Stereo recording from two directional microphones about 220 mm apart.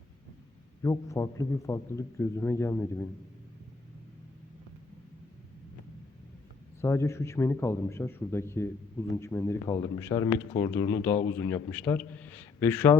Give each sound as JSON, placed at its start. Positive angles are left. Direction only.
{"t": 0.8, "sound": "speech", "side_deg": 15}
{"t": 6.8, "sound": "speech", "side_deg": 10}